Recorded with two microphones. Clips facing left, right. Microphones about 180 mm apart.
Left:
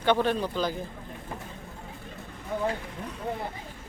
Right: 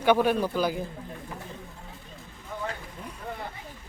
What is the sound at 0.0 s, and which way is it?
Speech, 10° right (ahead or behind).